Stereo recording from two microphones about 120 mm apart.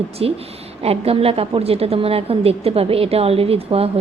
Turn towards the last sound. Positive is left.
turn(degrees=-55)  # may be behind; listen again after turning